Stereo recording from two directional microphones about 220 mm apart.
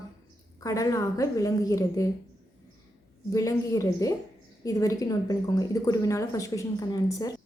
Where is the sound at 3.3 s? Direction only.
15° left (ahead or behind).